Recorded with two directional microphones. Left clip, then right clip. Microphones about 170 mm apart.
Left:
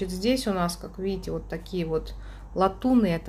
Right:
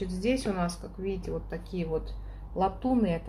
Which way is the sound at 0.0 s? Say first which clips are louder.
Left 3 dB; 30° left (ahead or behind).